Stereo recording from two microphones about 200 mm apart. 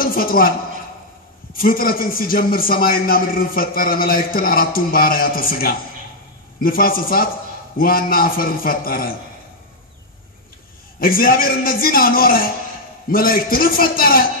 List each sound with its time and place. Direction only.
0.0 s a sound: 45° left (ahead or behind)
1.6 s a man's voice: 45° left (ahead or behind)
11.0 s a man's voice: 45° left (ahead or behind)